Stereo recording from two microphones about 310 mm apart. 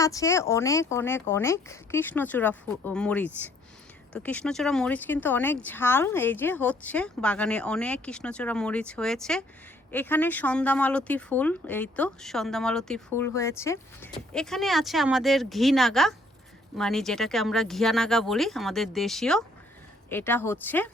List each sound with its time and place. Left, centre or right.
0.0 s speech: centre